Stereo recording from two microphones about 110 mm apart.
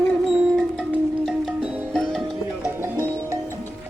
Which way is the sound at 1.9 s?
5° left (ahead or behind).